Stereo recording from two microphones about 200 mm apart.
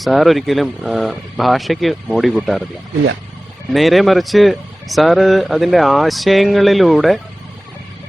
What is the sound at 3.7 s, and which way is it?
Speech, centre (ahead or behind).